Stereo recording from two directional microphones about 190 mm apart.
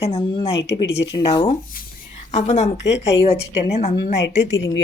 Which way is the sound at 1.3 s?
30° left (ahead or behind).